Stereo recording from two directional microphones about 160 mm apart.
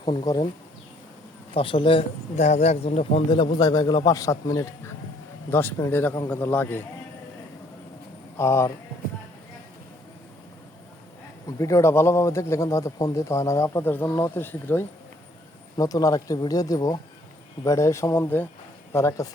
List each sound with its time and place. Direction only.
0.0 s speech: 30° left (ahead or behind)
1.5 s speech: 35° left (ahead or behind)
3.6 s a man's voice: 25° left (ahead or behind)
8.4 s speech: 15° left (ahead or behind)
11.4 s a man's voice: 20° left (ahead or behind)